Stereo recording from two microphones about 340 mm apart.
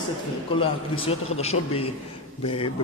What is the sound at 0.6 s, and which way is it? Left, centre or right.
Speech, centre.